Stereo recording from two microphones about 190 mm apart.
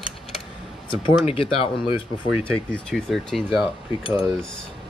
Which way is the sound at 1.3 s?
30° left (ahead or behind).